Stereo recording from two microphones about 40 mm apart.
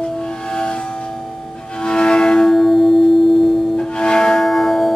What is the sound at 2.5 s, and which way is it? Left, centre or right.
Music, centre.